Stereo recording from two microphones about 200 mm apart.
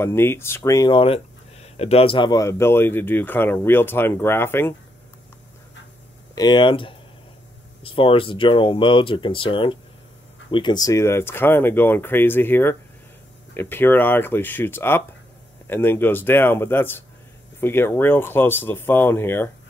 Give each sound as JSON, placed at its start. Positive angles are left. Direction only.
{"t": 0.0, "sound": "speech", "side_deg": 10}
{"t": 6.3, "sound": "speech", "side_deg": 20}